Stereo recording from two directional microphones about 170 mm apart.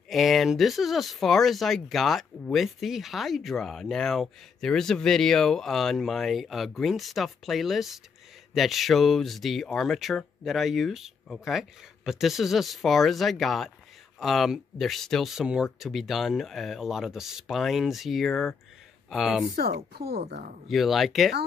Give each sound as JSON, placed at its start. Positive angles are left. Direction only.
{"t": 0.1, "sound": "speech", "side_deg": 0}
{"t": 19.5, "sound": "speech", "side_deg": -65}
{"t": 20.6, "sound": "speech", "side_deg": 0}